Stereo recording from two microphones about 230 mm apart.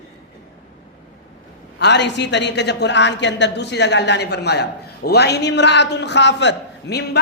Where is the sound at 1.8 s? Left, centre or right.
Left.